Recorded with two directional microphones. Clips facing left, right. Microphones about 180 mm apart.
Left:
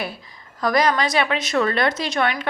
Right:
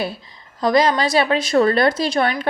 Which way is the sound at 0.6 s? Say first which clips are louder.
Right 3 dB; 25° right (ahead or behind).